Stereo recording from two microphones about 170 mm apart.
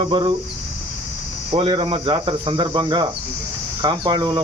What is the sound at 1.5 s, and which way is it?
Speech, 30° right (ahead or behind).